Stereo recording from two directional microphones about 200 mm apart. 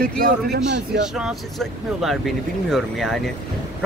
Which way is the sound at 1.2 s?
Centre (ahead or behind).